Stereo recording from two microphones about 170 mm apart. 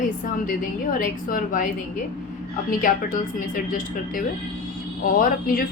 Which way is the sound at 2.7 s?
55° left (ahead or behind).